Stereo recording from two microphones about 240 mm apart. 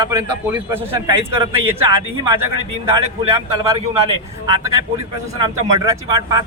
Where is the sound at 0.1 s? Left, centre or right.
Centre.